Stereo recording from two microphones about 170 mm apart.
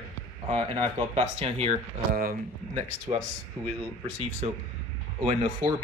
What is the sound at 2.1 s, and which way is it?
Speech, 60° right (ahead or behind).